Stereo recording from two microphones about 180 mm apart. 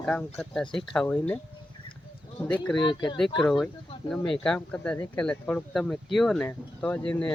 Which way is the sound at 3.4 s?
Centre (ahead or behind).